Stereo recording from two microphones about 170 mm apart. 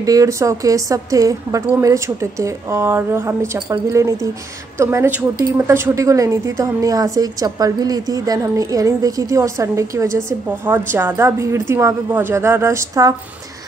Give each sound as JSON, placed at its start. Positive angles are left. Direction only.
{"t": 0.0, "sound": "a woman's voice", "side_deg": -20}